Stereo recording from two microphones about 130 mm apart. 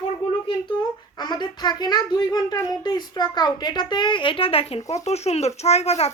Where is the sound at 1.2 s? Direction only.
35° left (ahead or behind).